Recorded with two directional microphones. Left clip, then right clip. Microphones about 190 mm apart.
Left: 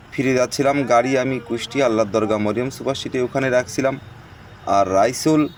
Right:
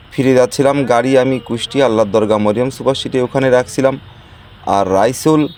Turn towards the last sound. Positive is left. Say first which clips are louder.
# right 5 dB
turn(degrees=-45)  # may be behind; listen again after turning